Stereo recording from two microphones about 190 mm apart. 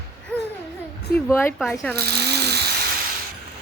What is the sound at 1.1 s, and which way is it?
Speech, 50° left (ahead or behind).